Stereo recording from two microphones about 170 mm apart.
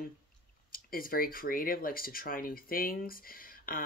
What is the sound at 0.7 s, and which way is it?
Speech, 60° left (ahead or behind).